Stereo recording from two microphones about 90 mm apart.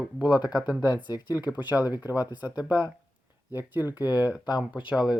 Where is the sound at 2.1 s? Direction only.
45° left (ahead or behind).